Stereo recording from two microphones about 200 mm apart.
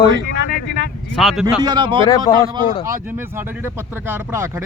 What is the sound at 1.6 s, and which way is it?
Speech, 20° right (ahead or behind).